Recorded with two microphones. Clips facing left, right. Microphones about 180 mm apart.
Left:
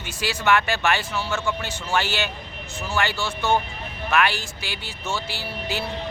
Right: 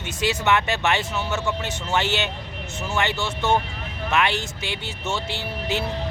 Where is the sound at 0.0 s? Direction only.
20° right (ahead or behind).